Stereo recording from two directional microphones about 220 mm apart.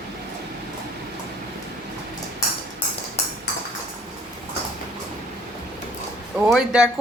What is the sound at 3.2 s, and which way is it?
Ping, 30° left (ahead or behind).